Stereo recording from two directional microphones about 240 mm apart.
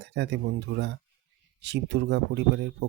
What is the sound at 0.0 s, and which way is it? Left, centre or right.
Speech, right.